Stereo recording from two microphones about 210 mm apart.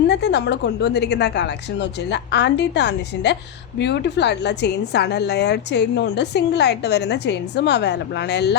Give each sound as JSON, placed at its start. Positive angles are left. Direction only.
{"t": 0.1, "sound": "a woman's voice", "side_deg": 55}